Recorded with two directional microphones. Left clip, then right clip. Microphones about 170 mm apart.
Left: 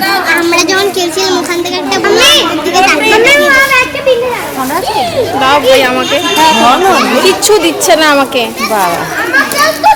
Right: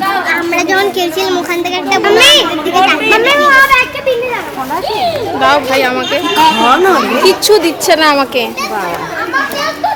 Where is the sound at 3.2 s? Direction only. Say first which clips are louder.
Even; 80° right.